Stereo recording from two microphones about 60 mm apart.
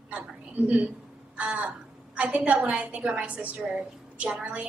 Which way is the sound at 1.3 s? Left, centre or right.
Right.